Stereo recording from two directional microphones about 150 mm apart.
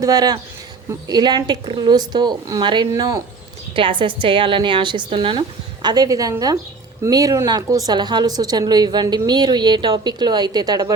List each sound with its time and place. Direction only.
0.0 s a woman's voice: 25° right (ahead or behind)